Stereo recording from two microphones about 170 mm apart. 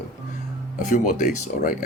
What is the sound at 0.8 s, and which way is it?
Speech, 50° left (ahead or behind).